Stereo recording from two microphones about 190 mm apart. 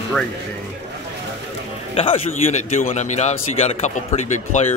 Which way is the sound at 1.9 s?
30° left (ahead or behind).